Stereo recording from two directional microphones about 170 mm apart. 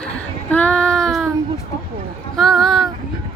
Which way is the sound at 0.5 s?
5° left (ahead or behind).